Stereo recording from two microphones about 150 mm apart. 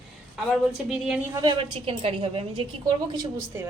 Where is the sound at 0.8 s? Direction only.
5° right (ahead or behind).